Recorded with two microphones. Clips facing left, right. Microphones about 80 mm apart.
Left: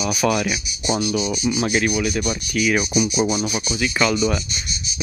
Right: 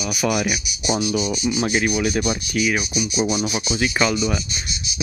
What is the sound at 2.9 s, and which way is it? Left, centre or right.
Speech, left.